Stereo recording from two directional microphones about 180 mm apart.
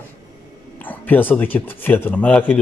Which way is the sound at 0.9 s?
10° left (ahead or behind).